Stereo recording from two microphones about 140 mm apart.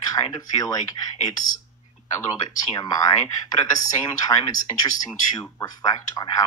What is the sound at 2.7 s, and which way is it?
Speech, 25° left (ahead or behind).